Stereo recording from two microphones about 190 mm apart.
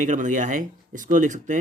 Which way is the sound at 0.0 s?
40° right (ahead or behind).